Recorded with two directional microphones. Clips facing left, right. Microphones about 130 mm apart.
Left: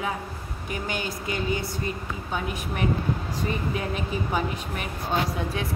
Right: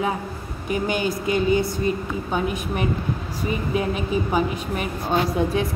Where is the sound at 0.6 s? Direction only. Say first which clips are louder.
Right 8 dB; 15° right (ahead or behind).